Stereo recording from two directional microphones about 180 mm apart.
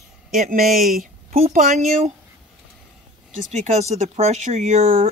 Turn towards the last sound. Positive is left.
turn(degrees=-40)  # may be behind; listen again after turning